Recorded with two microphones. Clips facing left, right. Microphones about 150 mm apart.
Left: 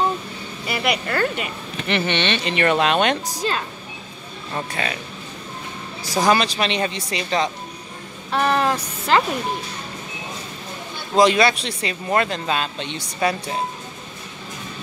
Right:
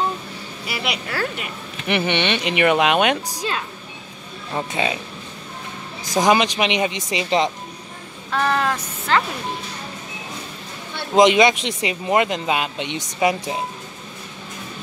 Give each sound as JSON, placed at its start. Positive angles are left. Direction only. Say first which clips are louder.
{"t": 0.7, "sound": "speech", "louder": "left 4 dB", "side_deg": -5}
{"t": 1.9, "sound": "speech", "louder": "right 1 dB", "side_deg": -15}
{"t": 4.6, "sound": "speech", "louder": "right 3 dB", "side_deg": -20}
{"t": 6.1, "sound": "speech", "louder": "right 1 dB", "side_deg": -15}
{"t": 8.3, "sound": "a sound", "louder": "left 1 dB", "side_deg": 20}
{"t": 11.1, "sound": "speech", "louder": "right 2 dB", "side_deg": -20}